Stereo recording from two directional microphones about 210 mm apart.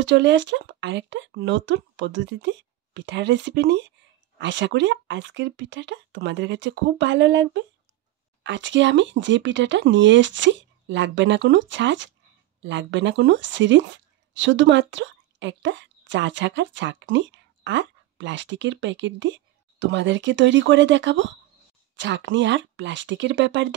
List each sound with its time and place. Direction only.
0.0 s speech: 60° right (ahead or behind)